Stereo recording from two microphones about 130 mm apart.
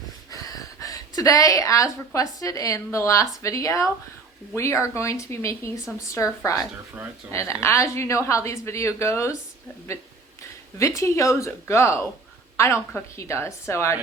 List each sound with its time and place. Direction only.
0.3 s a woman's voice: 30° left (ahead or behind)
10.8 s a woman's voice: 25° left (ahead or behind)